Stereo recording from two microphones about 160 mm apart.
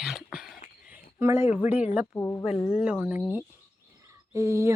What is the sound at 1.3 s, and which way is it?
Speech, 40° left (ahead or behind).